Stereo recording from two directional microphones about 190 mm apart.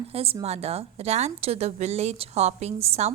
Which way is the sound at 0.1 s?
30° right (ahead or behind).